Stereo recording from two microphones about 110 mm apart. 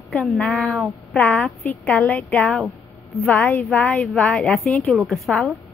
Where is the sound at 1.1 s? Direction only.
10° left (ahead or behind).